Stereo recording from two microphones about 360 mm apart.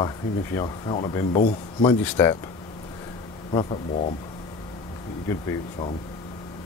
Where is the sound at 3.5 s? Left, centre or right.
Centre.